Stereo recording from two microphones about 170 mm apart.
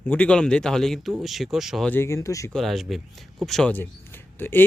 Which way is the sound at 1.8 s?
15° left (ahead or behind).